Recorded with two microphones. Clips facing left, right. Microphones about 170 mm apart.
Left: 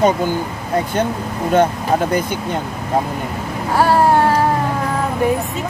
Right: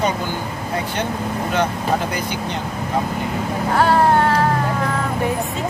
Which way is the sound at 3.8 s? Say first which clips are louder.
Left 2 dB; 10° left (ahead or behind).